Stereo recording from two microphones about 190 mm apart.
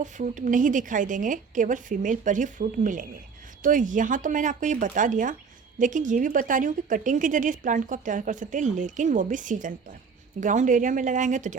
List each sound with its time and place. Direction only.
0.0 s speech: 40° right (ahead or behind)